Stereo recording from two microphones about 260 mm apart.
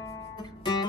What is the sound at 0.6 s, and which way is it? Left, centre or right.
Music, centre.